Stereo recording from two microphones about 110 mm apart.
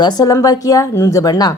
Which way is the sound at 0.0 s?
40° left (ahead or behind).